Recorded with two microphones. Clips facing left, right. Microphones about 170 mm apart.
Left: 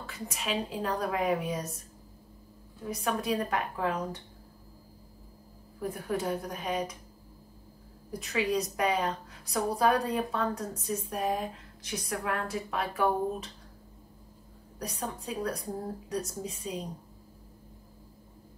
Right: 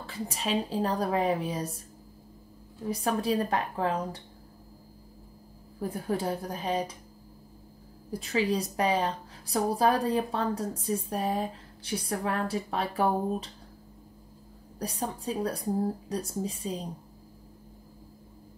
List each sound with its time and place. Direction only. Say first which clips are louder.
0.0 s a woman's voice: right 4 dB; 30° right (ahead or behind)
2.9 s a woman's voice: right 3 dB; 30° right (ahead or behind)
5.8 s a woman's voice: right 2 dB; 30° right (ahead or behind)
8.1 s a woman's voice: right 2 dB; 30° right (ahead or behind)
14.8 s a woman's voice: right 3 dB; 30° right (ahead or behind)